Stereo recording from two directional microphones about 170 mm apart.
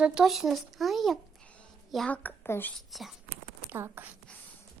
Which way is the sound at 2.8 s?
Centre (ahead or behind).